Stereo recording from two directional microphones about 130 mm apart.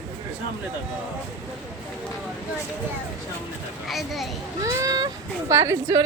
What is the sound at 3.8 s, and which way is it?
Speech, centre (ahead or behind).